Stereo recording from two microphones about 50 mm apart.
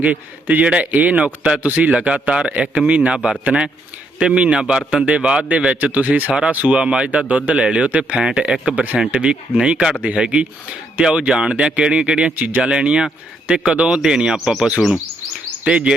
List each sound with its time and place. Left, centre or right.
0.0 s a man's voice: right
1.6 s a man's voice: right
1.9 s speech: right
6.7 s speech: right
8.6 s speech: right; by 14.6 s centre
15.6 s speech: centre